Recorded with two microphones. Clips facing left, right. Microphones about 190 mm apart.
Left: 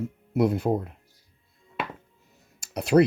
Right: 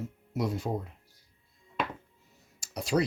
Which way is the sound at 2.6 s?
60° left (ahead or behind).